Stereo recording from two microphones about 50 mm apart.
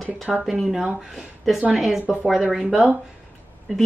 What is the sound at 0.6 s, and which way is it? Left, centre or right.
Speech, centre.